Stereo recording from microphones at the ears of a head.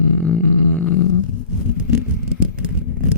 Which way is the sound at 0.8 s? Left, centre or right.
Left.